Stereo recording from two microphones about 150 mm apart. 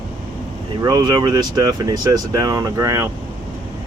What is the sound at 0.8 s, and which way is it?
Speech, 30° right (ahead or behind).